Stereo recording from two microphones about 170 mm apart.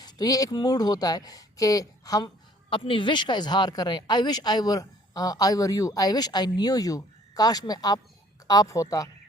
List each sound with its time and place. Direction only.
0.0 s speech: 20° left (ahead or behind)